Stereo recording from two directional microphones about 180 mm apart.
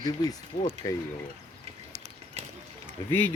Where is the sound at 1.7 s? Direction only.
35° right (ahead or behind).